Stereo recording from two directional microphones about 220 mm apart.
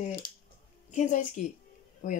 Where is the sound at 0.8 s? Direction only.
35° left (ahead or behind).